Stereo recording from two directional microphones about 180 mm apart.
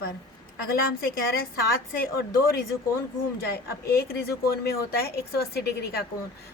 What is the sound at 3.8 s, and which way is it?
A woman's voice, 55° left (ahead or behind).